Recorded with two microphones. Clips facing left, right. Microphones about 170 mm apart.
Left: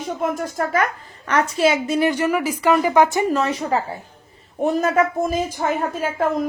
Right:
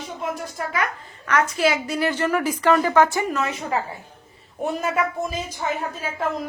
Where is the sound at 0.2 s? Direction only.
45° left (ahead or behind).